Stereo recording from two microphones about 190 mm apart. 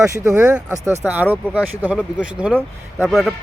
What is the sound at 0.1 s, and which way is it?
Speech, 15° right (ahead or behind).